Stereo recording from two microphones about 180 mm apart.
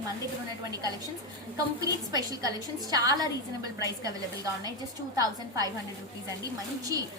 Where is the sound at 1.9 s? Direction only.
20° right (ahead or behind).